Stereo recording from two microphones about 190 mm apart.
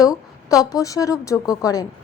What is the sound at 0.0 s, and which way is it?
A woman's voice, 20° left (ahead or behind).